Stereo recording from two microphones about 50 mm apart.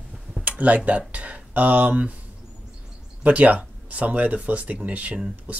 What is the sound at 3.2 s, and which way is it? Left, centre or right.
Speech, right.